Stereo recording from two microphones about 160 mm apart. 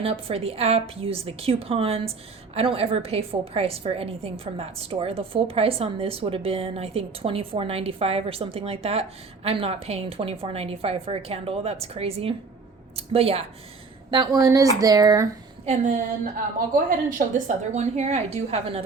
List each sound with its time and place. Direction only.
0.0 s a woman's voice: 35° right (ahead or behind)
14.1 s speech: 25° right (ahead or behind)
15.6 s a woman's voice: 50° right (ahead or behind)